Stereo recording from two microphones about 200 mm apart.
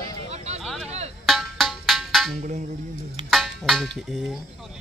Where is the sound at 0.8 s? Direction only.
30° right (ahead or behind).